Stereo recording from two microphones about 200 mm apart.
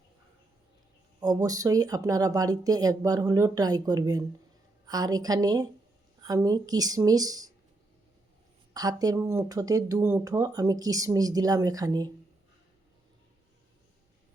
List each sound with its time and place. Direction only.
1.2 s a woman's voice: 20° right (ahead or behind)
8.7 s speech: 20° right (ahead or behind)